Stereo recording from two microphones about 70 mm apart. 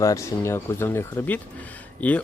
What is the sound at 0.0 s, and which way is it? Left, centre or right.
Speech, left.